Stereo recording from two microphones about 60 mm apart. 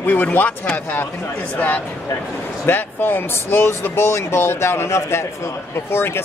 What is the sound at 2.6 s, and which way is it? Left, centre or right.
Speech, left.